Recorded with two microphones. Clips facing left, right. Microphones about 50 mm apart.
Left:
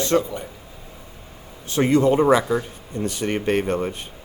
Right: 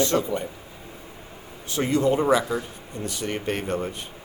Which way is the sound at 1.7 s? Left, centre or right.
Left.